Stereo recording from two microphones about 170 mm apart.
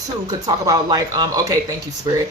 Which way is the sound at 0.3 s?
20° right (ahead or behind).